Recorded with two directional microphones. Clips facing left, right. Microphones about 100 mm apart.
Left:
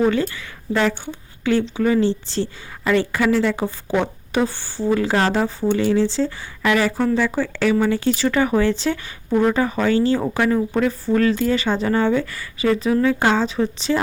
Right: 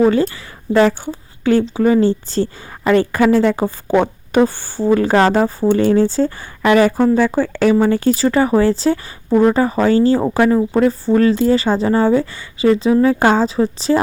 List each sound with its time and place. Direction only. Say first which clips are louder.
0.0 s a woman's voice: right 5 dB; 35° right (ahead or behind)